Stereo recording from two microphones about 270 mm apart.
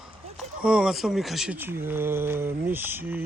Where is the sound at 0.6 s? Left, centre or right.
Centre.